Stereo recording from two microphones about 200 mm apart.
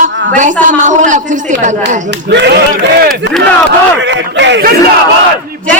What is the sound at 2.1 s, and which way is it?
Speech, 60° right (ahead or behind).